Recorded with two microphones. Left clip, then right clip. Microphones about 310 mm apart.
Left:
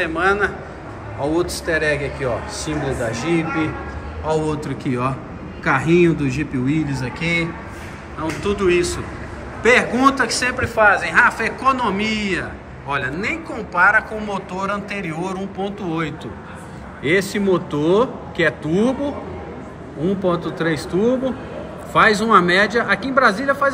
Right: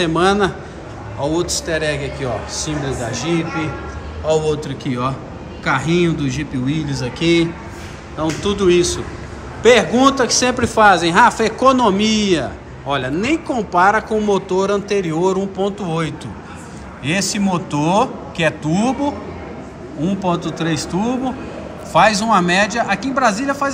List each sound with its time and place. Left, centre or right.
0.0 s a man's voice: centre
1.2 s a man's voice: centre
20.1 s a man's voice: centre